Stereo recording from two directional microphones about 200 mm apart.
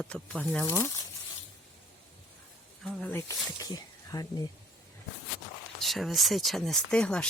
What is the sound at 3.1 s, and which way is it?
Speech, 15° left (ahead or behind).